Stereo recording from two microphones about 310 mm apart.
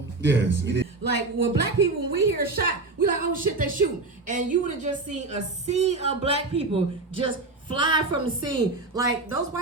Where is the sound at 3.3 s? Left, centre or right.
Right; by 9.6 s centre.